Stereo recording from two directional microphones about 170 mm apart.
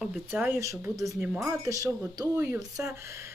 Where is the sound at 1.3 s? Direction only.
5° right (ahead or behind).